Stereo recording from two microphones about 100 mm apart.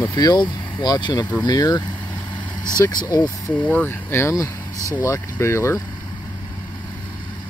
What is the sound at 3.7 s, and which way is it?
Speech, 20° left (ahead or behind).